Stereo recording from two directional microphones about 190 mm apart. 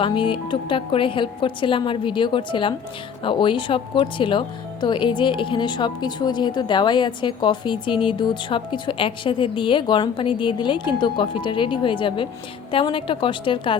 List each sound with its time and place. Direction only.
0.0 s speech: 25° left (ahead or behind)